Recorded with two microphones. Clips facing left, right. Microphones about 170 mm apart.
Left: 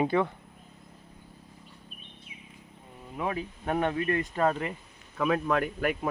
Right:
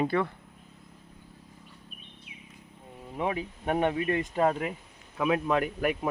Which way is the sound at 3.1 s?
20° right (ahead or behind).